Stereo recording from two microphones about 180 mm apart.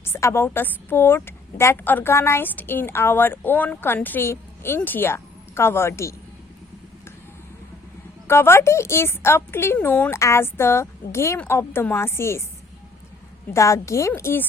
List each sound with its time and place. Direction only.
0.0 s a woman's voice: 15° left (ahead or behind)
8.3 s a woman's voice: 15° left (ahead or behind)
13.5 s a woman's voice: 15° left (ahead or behind)